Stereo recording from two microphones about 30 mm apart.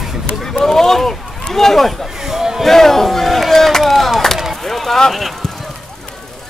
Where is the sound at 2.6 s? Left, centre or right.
Centre.